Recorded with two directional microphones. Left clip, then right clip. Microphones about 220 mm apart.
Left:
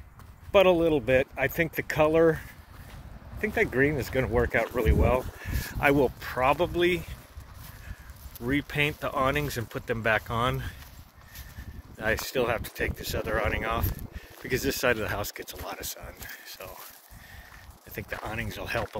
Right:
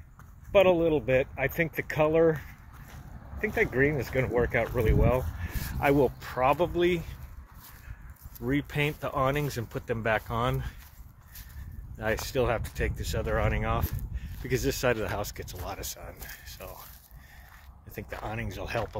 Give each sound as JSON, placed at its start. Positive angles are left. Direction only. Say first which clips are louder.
{"t": 0.5, "sound": "speech", "louder": "left 1 dB", "side_deg": 40}
{"t": 5.8, "sound": "speech", "louder": "left 1 dB", "side_deg": 15}
{"t": 8.5, "sound": "speech", "louder": "left 2 dB", "side_deg": 10}
{"t": 12.0, "sound": "speech", "louder": "left 1 dB", "side_deg": 10}
{"t": 17.9, "sound": "speech", "louder": "left 2 dB", "side_deg": 10}